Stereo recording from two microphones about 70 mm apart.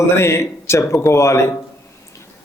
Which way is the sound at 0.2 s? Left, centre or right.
Left.